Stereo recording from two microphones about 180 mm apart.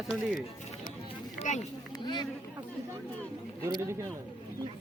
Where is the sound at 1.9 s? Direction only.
25° left (ahead or behind).